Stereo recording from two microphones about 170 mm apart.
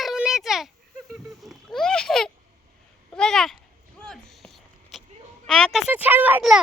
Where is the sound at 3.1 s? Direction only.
5° left (ahead or behind).